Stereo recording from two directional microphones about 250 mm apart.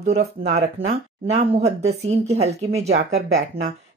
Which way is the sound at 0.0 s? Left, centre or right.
Right.